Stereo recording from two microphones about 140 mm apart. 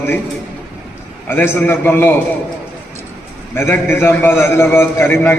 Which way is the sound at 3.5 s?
15° left (ahead or behind).